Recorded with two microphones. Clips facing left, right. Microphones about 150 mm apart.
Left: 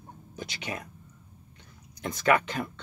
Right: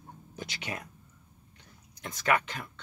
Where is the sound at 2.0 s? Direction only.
40° left (ahead or behind).